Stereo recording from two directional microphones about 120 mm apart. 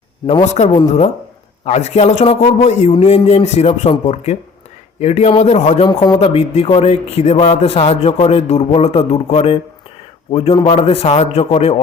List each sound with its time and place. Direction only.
0.4 s a man's voice: 70° left (ahead or behind)
2.4 s a man's voice: 75° left (ahead or behind)
5.8 s speech: 35° left (ahead or behind)
6.1 s a man's voice: 55° left (ahead or behind)
10.5 s a man's voice: 45° left (ahead or behind); by 11.8 s 65° left (ahead or behind)